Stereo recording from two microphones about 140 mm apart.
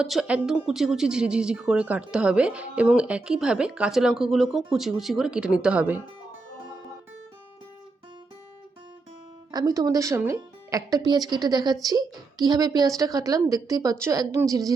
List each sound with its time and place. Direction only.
0.0 s speech: 5° right (ahead or behind)
9.5 s speech: 25° right (ahead or behind)